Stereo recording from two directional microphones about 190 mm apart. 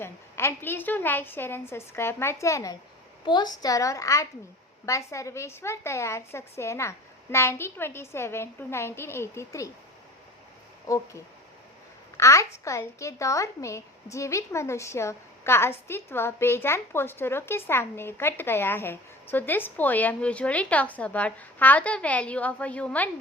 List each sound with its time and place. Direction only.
0.0 s a woman's voice: 15° left (ahead or behind)
10.8 s a woman's voice: 15° left (ahead or behind)